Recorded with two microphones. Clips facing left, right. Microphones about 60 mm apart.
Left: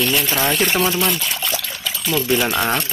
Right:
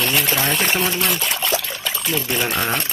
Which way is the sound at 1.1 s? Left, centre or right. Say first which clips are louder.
Right 1 dB; right.